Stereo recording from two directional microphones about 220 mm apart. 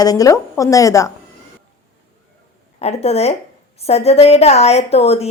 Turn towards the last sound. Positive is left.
turn(degrees=30)  # may be behind; listen again after turning